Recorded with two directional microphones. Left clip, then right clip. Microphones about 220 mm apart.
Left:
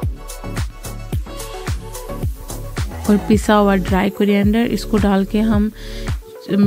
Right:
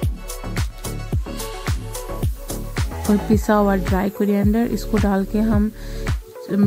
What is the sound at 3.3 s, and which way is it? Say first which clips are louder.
Speech: left 4 dB; 30° left (ahead or behind).